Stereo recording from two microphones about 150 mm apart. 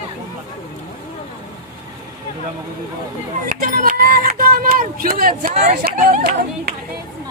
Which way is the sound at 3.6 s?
70° right (ahead or behind).